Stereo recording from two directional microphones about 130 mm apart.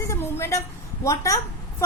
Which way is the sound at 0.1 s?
20° left (ahead or behind).